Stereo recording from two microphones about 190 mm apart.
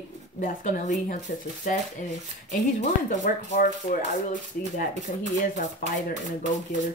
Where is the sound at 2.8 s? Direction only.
40° left (ahead or behind).